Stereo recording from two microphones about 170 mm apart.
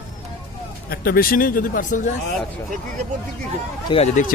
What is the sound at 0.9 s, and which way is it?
Speech, 60° left (ahead or behind).